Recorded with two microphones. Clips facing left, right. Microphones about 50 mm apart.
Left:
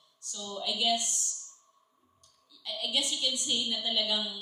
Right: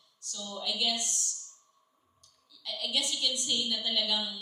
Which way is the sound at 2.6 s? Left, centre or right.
Left.